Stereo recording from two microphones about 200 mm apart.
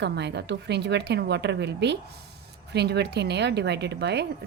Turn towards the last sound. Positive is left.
turn(degrees=-55)  # may be behind; listen again after turning